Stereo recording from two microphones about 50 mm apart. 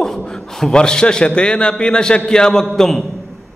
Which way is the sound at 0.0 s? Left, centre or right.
Centre.